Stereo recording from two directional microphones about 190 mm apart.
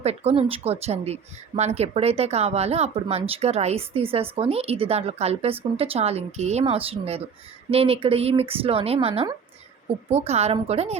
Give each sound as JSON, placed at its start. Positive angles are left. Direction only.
{"t": 0.0, "sound": "speech", "side_deg": -35}